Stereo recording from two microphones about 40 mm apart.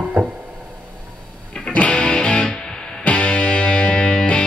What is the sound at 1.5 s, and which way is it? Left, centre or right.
Music, left.